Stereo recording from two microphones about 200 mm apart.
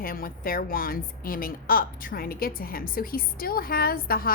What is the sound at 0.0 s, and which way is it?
A woman's voice, 45° left (ahead or behind).